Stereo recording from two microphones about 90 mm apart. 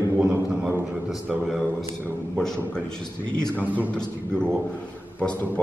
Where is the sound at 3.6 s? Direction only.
20° right (ahead or behind).